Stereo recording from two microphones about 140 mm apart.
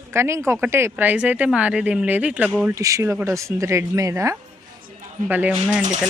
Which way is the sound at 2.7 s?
25° right (ahead or behind).